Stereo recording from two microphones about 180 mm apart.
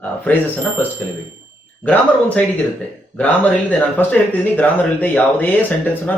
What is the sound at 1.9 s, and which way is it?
Speech, 10° left (ahead or behind).